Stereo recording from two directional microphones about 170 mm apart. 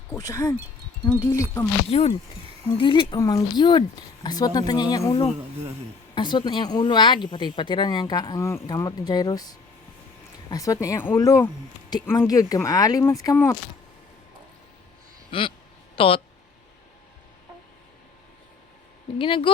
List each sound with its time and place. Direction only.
0.2 s speech: 20° left (ahead or behind)
1.9 s speech: 35° left (ahead or behind); by 13.6 s 15° left (ahead or behind)
15.3 s a sound: 30° left (ahead or behind)
16.0 s speech: 30° left (ahead or behind)
19.2 s speech: 30° left (ahead or behind)